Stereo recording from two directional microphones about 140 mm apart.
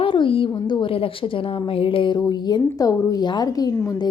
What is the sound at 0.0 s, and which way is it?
A woman's voice, 40° left (ahead or behind).